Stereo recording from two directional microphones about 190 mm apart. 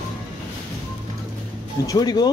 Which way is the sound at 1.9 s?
20° left (ahead or behind).